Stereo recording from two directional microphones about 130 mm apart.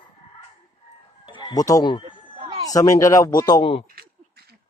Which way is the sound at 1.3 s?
35° left (ahead or behind).